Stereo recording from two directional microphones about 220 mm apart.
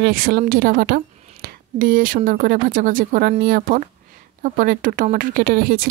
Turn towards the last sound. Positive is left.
turn(degrees=-40)  # may be behind; listen again after turning